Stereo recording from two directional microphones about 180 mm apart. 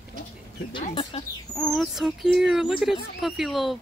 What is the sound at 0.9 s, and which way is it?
Speech, 30° left (ahead or behind).